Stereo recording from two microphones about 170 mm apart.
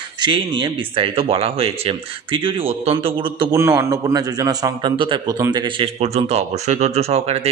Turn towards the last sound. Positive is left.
turn(degrees=-35)  # may be behind; listen again after turning